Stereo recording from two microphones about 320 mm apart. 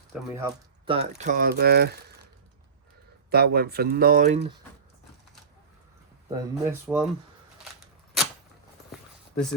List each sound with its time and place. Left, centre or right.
0.1 s speech: centre
1.2 s speech: right
3.2 s speech: right
6.5 s speech: centre
8.9 s clip-clop: centre